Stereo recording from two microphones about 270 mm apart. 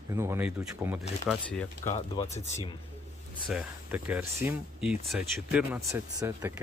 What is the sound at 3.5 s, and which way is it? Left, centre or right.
Speech, centre.